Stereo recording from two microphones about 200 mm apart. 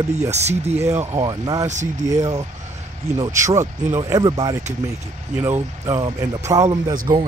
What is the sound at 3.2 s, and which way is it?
Speech, 15° right (ahead or behind).